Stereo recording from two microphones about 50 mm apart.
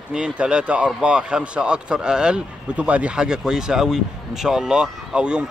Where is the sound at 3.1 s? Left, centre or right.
Centre.